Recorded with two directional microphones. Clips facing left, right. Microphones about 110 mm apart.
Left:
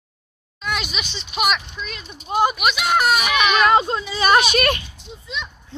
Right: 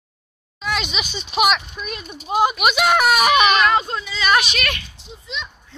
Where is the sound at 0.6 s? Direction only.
5° left (ahead or behind).